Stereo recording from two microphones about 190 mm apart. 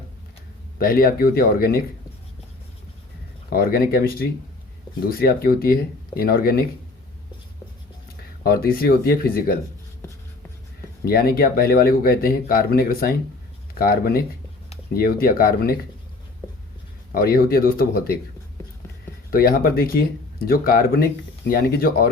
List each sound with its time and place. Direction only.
0.8 s speech: 50° left (ahead or behind)
3.5 s speech: 50° left (ahead or behind)
8.4 s speech: 50° left (ahead or behind)
11.0 s speech: 50° left (ahead or behind)
17.2 s speech: 50° left (ahead or behind)
19.3 s speech: 50° left (ahead or behind)